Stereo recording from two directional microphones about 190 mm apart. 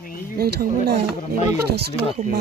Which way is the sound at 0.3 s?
55° right (ahead or behind).